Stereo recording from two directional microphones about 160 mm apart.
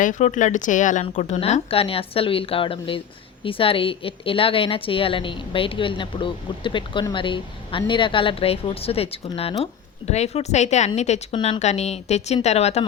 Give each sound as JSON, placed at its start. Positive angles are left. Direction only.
{"t": 0.0, "sound": "a woman's voice", "side_deg": 50}
{"t": 11.3, "sound": "a woman's voice", "side_deg": 30}
{"t": 11.6, "sound": "a woman's voice", "side_deg": 45}